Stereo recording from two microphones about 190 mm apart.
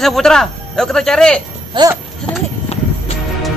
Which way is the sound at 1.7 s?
25° right (ahead or behind).